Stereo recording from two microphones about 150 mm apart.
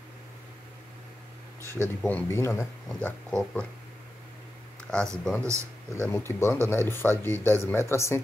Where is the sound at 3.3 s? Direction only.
5° left (ahead or behind).